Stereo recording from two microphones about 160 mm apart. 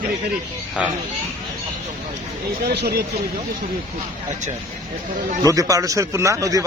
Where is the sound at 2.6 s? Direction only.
85° right.